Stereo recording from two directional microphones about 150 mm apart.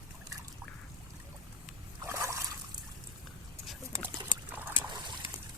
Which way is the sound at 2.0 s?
20° right (ahead or behind).